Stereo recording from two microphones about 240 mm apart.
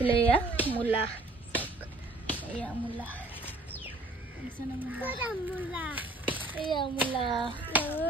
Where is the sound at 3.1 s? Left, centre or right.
Centre.